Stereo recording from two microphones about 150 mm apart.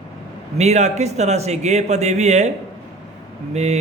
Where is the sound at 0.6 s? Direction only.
50° right (ahead or behind).